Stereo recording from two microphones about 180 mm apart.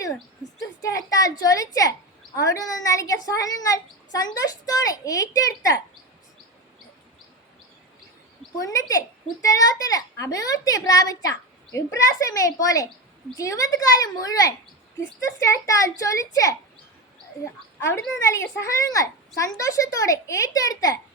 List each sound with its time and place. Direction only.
0.8 s a woman's voice: 20° left (ahead or behind)
8.5 s a woman's voice: 20° left (ahead or behind)